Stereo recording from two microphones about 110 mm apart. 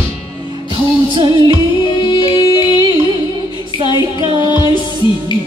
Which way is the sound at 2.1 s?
40° left (ahead or behind).